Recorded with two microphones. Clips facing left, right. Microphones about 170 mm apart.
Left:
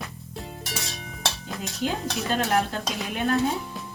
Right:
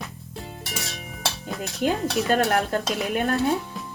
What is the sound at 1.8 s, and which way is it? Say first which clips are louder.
A woman's voice: right 5 dB; 55° right (ahead or behind).